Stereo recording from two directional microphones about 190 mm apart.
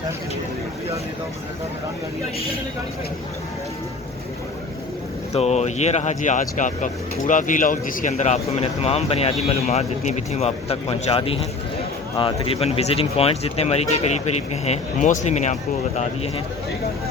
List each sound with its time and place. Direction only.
5.3 s speech: 35° left (ahead or behind)